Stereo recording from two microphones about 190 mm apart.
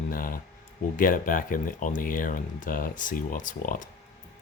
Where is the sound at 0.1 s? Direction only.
50° left (ahead or behind).